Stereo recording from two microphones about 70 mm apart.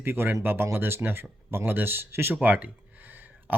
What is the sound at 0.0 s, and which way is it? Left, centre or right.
Speech, right.